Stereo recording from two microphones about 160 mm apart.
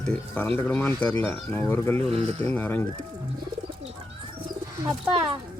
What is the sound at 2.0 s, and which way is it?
Speech, 40° right (ahead or behind).